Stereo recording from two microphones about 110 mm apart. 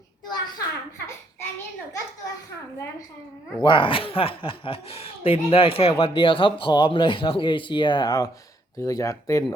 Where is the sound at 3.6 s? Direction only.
50° left (ahead or behind).